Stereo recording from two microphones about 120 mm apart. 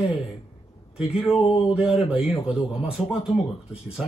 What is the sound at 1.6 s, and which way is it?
Speech, 5° right (ahead or behind).